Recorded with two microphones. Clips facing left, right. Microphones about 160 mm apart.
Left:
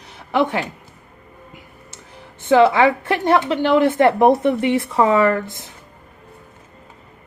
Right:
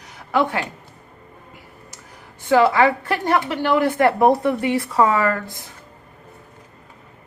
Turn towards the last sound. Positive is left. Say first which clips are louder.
# left 5 dB
turn(degrees=20)  # may be behind; listen again after turning